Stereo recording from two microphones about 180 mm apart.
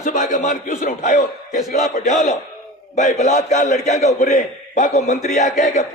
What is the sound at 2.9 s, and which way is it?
A man's voice, 40° left (ahead or behind).